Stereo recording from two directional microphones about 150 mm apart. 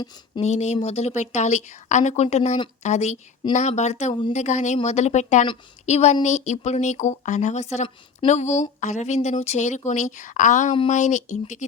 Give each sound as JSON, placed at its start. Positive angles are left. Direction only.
{"t": 0.4, "sound": "speech", "side_deg": 45}